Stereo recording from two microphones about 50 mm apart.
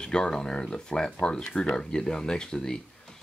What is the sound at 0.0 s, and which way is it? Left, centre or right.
Speech, centre.